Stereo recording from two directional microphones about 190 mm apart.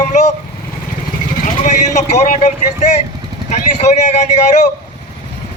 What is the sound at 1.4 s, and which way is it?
Speech, 40° left (ahead or behind).